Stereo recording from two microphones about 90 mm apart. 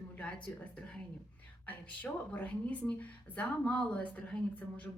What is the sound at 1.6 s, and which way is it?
A woman's voice, 20° left (ahead or behind).